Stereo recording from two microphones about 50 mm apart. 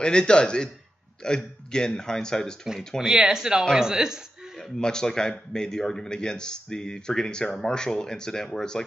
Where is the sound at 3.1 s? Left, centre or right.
Centre.